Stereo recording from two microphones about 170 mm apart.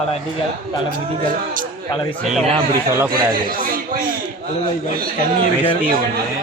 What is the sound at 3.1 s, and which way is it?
A man's voice, 60° right (ahead or behind).